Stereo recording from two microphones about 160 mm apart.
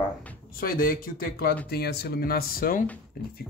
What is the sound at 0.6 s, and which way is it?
Speech, 65° left (ahead or behind).